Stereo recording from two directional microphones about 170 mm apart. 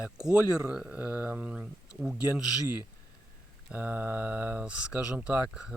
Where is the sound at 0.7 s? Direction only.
5° right (ahead or behind).